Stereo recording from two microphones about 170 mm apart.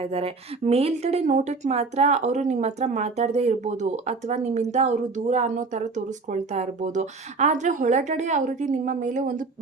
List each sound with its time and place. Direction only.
0.0 s speech: 35° right (ahead or behind)